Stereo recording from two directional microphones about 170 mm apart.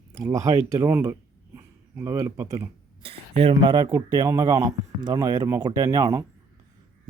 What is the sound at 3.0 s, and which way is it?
Speech, 35° right (ahead or behind).